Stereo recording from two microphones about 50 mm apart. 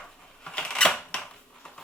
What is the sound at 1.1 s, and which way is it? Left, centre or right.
Cap gun, centre.